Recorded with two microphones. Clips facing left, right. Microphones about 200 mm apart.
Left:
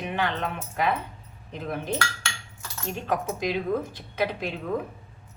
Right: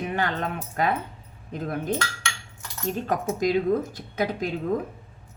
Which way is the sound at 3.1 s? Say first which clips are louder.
Right 3 dB; 45° right (ahead or behind).